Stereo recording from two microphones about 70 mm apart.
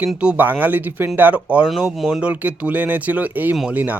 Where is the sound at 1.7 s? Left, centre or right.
Centre.